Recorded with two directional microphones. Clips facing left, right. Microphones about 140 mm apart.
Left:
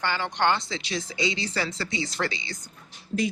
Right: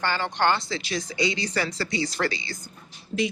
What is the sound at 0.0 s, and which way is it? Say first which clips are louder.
Speech: right 1 dB; 15° left (ahead or behind).